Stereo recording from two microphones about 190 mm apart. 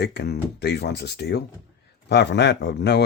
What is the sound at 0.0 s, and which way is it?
Speech, 60° left (ahead or behind).